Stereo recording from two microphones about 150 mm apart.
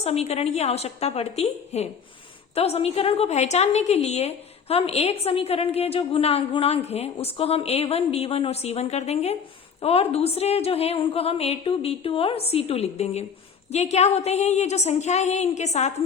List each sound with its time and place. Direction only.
0.0 s a woman's voice: 45° left (ahead or behind)